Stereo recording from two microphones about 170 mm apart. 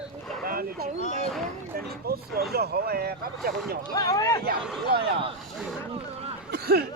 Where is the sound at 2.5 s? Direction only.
70° right (ahead or behind).